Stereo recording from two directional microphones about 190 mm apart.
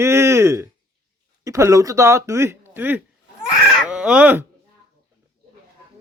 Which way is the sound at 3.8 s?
5° right (ahead or behind).